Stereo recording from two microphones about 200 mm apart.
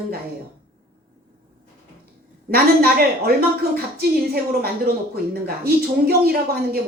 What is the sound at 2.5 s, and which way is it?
Speech, 50° right (ahead or behind).